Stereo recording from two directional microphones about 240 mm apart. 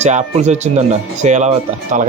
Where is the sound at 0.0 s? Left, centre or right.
Right.